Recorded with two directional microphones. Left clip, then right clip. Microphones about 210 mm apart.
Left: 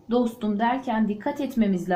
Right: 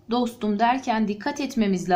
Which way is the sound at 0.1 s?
15° right (ahead or behind).